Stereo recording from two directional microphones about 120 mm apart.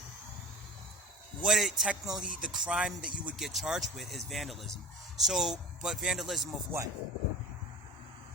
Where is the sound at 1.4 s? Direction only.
Centre (ahead or behind).